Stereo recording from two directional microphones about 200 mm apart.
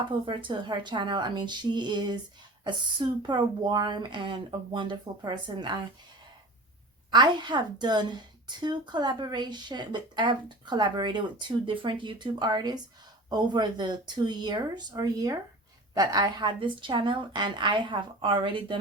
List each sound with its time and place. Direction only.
0.3 s a woman's voice: 25° right (ahead or behind)
7.1 s a woman's voice: 20° right (ahead or behind)